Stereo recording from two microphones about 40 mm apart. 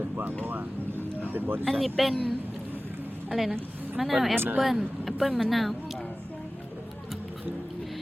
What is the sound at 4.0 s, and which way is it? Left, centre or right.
Speech, centre.